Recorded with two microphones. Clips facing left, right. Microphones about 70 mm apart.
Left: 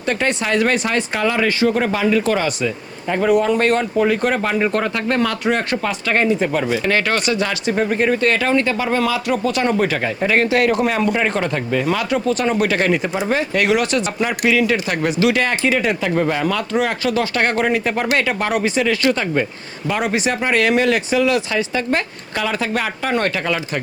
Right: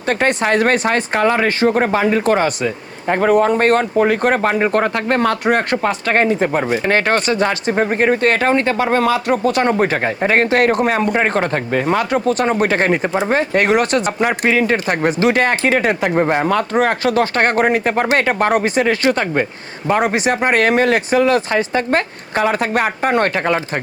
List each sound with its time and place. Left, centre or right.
0.1 s speech: right